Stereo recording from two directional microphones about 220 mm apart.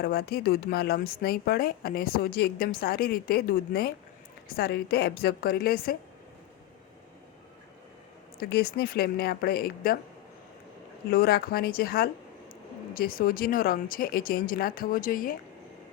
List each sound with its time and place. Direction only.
0.0 s speech: 45° left (ahead or behind)
8.4 s speech: 45° left (ahead or behind)
11.1 s speech: 45° left (ahead or behind)